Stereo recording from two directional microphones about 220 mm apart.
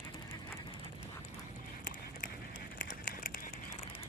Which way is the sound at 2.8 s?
40° left (ahead or behind).